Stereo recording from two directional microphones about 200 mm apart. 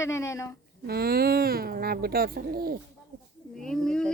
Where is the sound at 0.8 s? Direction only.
50° right (ahead or behind).